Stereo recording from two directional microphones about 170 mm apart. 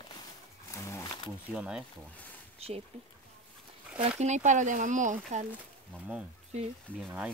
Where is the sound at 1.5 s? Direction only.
5° right (ahead or behind).